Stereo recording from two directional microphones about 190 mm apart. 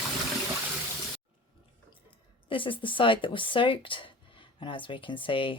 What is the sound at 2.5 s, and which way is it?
Speech, 25° left (ahead or behind).